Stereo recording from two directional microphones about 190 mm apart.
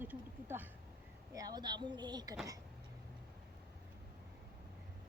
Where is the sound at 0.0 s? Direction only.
10° right (ahead or behind).